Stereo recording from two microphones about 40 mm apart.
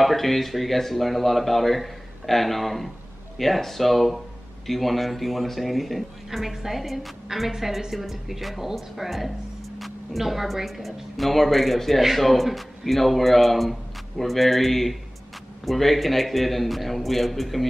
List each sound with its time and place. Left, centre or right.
0.0 s speech: centre